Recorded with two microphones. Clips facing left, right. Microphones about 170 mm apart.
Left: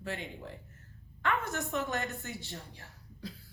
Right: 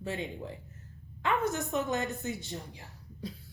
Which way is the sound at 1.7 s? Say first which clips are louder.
Right 3 dB; 20° right (ahead or behind).